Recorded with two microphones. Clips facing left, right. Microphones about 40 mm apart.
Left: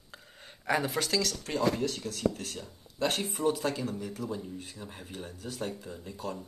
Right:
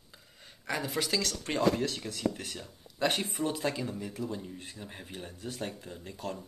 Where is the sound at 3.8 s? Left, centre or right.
Centre.